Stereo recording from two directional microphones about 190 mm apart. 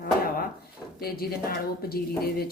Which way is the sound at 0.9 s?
55° left (ahead or behind).